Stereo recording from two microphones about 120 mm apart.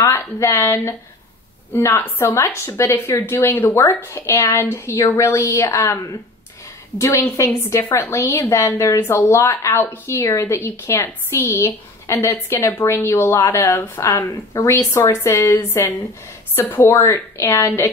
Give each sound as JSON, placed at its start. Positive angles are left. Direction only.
{"t": 0.0, "sound": "a woman's voice", "side_deg": 25}